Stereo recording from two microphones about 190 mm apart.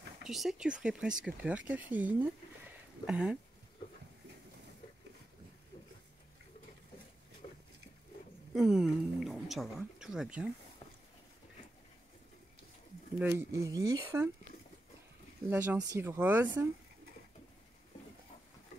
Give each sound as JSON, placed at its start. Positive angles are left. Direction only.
{"t": 0.2, "sound": "speech", "side_deg": 0}
{"t": 7.4, "sound": "a sound", "side_deg": 40}
{"t": 8.5, "sound": "speech", "side_deg": 0}
{"t": 13.2, "sound": "speech", "side_deg": -10}
{"t": 15.5, "sound": "speech", "side_deg": -10}